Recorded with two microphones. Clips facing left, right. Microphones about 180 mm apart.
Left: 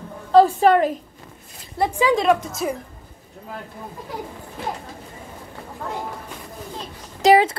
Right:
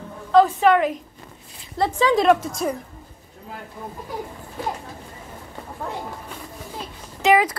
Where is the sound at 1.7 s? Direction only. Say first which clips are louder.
Even; 15° left (ahead or behind).